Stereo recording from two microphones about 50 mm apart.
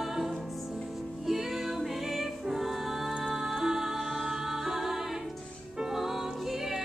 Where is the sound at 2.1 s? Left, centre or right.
Centre.